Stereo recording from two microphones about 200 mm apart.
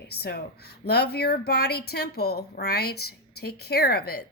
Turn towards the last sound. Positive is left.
turn(degrees=50)  # may be behind; listen again after turning